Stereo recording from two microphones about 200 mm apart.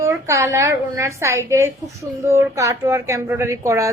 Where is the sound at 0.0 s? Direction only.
15° right (ahead or behind).